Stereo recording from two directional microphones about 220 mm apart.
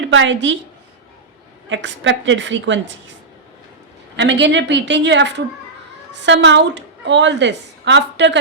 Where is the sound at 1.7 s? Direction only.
55° right (ahead or behind).